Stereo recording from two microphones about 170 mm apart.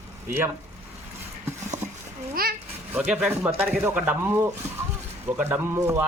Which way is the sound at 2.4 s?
60° right (ahead or behind).